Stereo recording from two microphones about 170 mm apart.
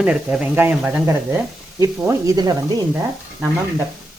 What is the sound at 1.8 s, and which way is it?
Speech, 20° right (ahead or behind).